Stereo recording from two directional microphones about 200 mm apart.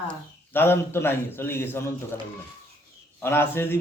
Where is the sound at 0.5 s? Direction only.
10° left (ahead or behind).